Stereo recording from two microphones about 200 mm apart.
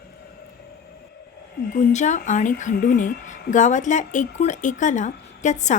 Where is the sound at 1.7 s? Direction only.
35° left (ahead or behind).